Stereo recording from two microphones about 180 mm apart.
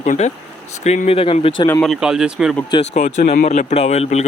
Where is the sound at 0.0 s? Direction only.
40° left (ahead or behind).